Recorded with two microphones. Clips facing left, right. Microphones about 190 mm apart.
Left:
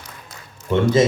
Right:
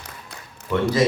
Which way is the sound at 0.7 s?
25° left (ahead or behind).